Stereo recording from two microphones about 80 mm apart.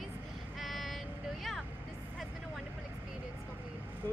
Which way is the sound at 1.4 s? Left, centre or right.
Centre.